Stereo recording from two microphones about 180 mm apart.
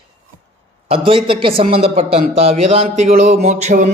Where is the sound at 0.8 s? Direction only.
30° right (ahead or behind).